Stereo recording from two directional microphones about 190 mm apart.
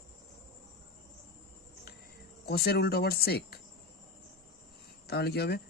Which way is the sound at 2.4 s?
55° left (ahead or behind).